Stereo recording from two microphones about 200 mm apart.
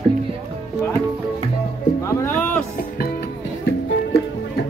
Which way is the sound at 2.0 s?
10° left (ahead or behind).